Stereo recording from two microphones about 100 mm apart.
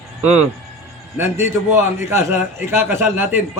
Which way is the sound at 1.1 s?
25° right (ahead or behind).